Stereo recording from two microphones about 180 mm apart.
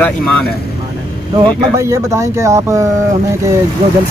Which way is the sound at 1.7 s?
15° right (ahead or behind).